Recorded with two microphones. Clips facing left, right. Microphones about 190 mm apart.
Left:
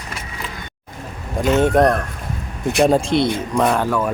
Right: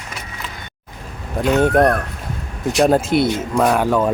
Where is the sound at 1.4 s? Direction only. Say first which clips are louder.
Even; centre (ahead or behind).